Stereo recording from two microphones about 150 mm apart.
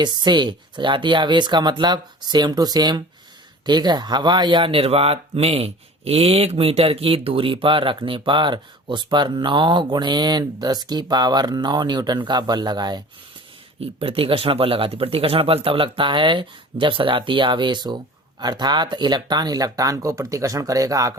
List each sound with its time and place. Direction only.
0.0 s speech: 30° right (ahead or behind)
13.7 s speech: 40° right (ahead or behind); by 21.1 s 25° right (ahead or behind)